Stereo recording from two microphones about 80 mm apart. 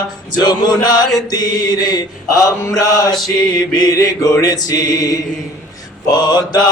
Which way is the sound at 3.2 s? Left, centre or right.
Left.